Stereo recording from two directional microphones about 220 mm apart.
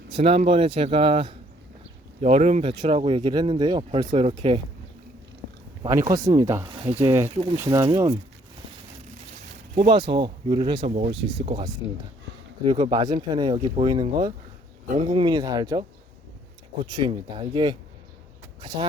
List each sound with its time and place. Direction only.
0.1 s speech: 25° right (ahead or behind)
5.8 s speech: 15° right (ahead or behind)
7.3 s speech: 25° right (ahead or behind)
7.6 s speech: 15° right (ahead or behind)
9.9 s speech: 20° right (ahead or behind)